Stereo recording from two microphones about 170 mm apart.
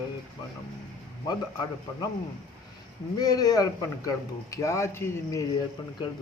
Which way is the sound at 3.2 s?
20° left (ahead or behind).